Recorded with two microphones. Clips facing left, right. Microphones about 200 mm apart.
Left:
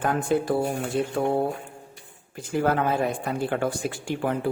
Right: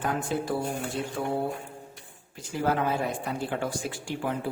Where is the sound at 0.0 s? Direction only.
55° left (ahead or behind).